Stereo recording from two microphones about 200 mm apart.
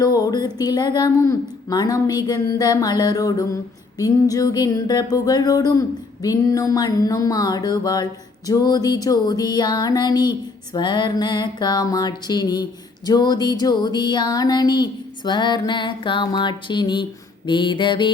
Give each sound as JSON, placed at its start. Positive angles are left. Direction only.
{"t": 0.0, "sound": "speech", "side_deg": 20}